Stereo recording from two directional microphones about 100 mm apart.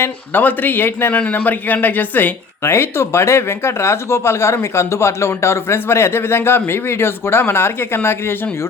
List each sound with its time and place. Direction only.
0.0 s a man's voice: 20° left (ahead or behind)